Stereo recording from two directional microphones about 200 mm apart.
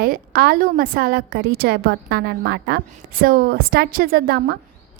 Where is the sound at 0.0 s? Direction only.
45° right (ahead or behind).